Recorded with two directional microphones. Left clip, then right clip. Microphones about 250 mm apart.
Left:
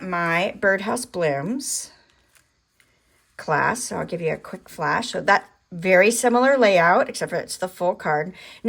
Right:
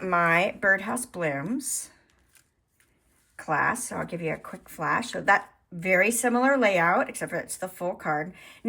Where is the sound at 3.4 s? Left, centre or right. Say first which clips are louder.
Left 4 dB; centre.